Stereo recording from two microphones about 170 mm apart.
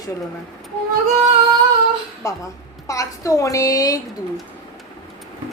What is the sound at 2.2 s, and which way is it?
A woman's voice, 20° left (ahead or behind).